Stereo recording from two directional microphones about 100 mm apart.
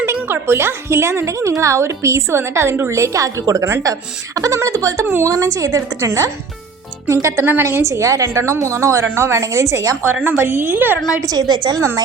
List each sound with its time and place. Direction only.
0.0 s a woman's voice: 25° right (ahead or behind)
10.3 s speech: 20° right (ahead or behind)
11.2 s a woman's voice: 40° right (ahead or behind)